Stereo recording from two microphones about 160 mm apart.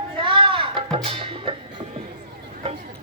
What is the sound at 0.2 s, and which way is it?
Music, 35° right (ahead or behind).